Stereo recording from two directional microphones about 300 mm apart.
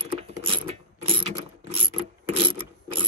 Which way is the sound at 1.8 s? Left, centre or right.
Centre.